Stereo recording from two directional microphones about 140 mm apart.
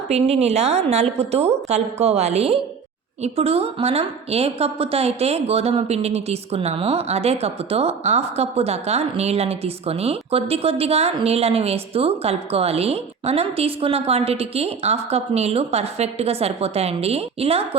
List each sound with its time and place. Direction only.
0.1 s a woman's voice: 50° right (ahead or behind)